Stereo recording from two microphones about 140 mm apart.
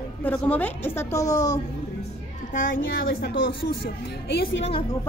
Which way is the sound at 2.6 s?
80° left.